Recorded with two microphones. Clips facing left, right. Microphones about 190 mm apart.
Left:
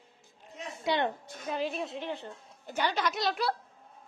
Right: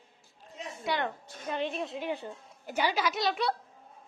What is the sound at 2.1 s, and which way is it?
A woman's voice, 10° right (ahead or behind).